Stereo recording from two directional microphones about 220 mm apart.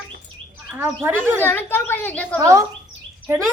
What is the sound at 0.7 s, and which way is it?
Speech, 10° right (ahead or behind).